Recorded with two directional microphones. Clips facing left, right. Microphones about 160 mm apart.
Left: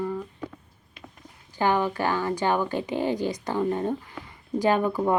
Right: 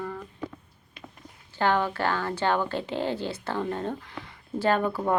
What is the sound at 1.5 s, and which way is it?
Speech, 10° left (ahead or behind).